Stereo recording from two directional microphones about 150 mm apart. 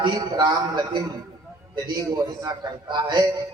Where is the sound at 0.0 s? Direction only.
30° right (ahead or behind).